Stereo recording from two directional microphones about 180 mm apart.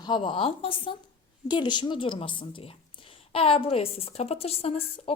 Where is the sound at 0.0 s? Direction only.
25° left (ahead or behind).